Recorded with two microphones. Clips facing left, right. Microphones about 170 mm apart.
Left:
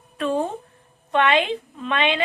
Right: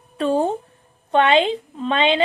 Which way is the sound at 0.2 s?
30° right (ahead or behind).